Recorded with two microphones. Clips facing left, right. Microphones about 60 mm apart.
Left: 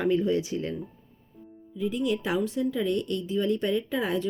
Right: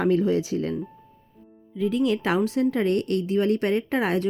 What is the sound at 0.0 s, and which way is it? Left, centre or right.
Speech, right.